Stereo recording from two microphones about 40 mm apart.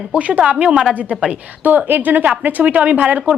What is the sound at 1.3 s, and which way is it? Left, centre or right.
A woman's voice, right.